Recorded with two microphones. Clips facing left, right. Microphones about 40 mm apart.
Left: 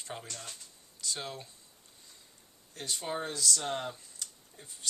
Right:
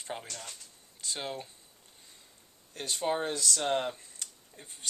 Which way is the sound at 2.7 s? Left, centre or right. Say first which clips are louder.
Right 5 dB; right.